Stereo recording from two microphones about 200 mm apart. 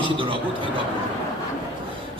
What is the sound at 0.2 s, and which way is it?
Speech, 25° right (ahead or behind).